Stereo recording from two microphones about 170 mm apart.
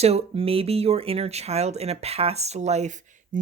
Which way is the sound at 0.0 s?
35° right (ahead or behind).